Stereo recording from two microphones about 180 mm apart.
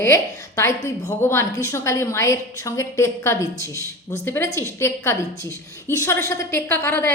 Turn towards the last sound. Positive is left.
turn(degrees=15)  # may be behind; listen again after turning